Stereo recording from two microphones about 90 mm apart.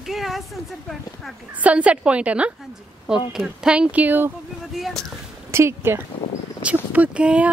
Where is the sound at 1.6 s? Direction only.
15° right (ahead or behind).